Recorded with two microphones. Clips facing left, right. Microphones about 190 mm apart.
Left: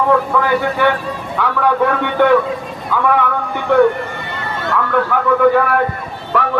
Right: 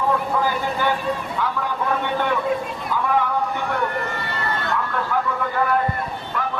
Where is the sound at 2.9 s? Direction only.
80° left.